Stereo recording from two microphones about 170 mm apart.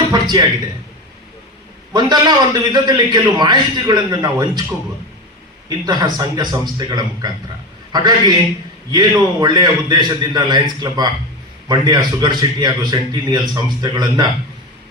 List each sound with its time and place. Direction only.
0.1 s a sound: 25° right (ahead or behind)
1.9 s a man's voice: 25° right (ahead or behind)
5.6 s a man's voice: 25° right (ahead or behind)